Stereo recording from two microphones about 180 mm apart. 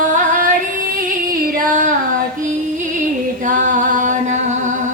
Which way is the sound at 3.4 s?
45° right (ahead or behind).